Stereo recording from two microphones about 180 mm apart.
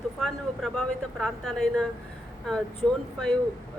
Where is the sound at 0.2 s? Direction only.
Centre (ahead or behind).